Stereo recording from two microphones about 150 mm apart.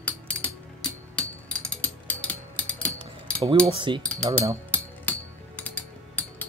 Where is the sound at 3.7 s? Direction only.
30° right (ahead or behind).